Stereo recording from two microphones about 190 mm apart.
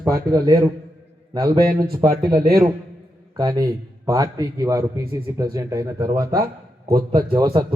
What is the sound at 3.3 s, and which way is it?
A man's voice, 20° right (ahead or behind).